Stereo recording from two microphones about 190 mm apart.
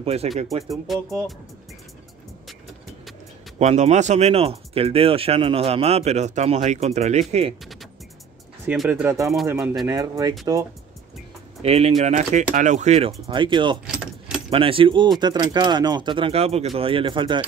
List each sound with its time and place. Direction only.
0.0 s speech: 30° right (ahead or behind)
0.9 s speech: centre (ahead or behind)
3.5 s speech: 35° right (ahead or behind)
8.6 s speech: 5° right (ahead or behind)
9.1 s speech: 15° right (ahead or behind)
11.6 s speech: 35° right (ahead or behind)
13.8 s keys jangling: 5° right (ahead or behind)
14.5 s speech: 30° right (ahead or behind)